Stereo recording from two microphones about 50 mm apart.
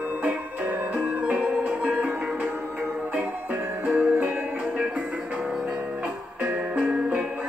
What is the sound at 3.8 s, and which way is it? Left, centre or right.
Music, right.